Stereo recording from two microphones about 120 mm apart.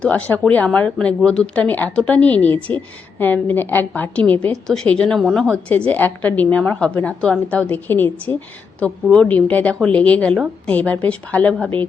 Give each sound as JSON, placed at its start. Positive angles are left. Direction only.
{"t": 0.0, "sound": "a woman's voice", "side_deg": 10}